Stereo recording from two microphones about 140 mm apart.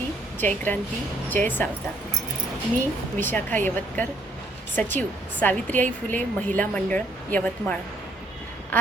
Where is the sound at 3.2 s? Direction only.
15° left (ahead or behind).